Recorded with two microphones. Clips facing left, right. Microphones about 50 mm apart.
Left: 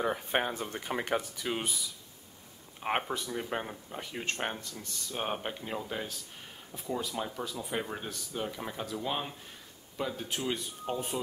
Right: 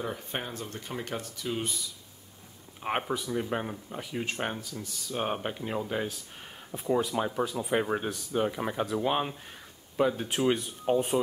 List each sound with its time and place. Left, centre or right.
0.0 s speech: left
1.6 s speech: centre
6.7 s speech: right